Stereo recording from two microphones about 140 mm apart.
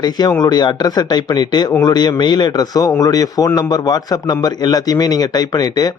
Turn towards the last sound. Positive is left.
turn(degrees=30)  # may be behind; listen again after turning